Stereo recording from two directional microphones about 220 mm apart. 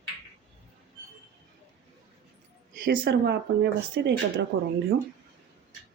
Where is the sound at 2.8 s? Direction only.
45° right (ahead or behind).